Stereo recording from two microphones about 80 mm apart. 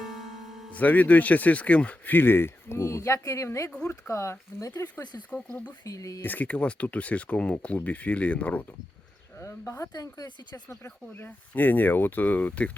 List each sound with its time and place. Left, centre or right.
0.0 s music: centre
0.7 s speech: centre; by 3.7 s left
3.7 s speech: centre
4.1 s speech: left
5.3 s speech: centre
5.8 s speech: left
6.2 s speech: left
9.4 s speech: left
9.9 s speech: left
10.8 s speech: left